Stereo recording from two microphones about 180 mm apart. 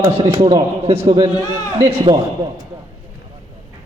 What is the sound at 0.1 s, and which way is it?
A man's voice, 30° right (ahead or behind).